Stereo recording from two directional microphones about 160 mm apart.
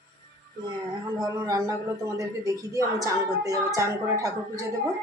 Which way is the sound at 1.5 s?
20° right (ahead or behind).